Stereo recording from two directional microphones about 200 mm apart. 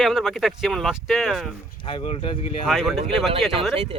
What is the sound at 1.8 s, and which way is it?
Speech, 25° left (ahead or behind).